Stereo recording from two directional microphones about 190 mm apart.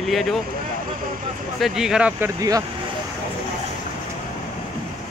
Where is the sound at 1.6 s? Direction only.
Centre (ahead or behind).